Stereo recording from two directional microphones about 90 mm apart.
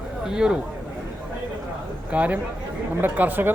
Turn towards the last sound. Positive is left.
turn(degrees=-20)  # may be behind; listen again after turning